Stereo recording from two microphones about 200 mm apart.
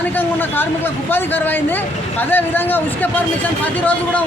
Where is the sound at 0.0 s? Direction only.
10° left (ahead or behind).